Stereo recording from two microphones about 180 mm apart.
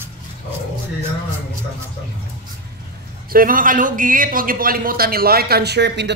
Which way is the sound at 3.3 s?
50° right (ahead or behind).